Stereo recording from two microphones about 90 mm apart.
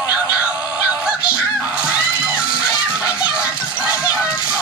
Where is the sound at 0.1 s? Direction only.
15° right (ahead or behind).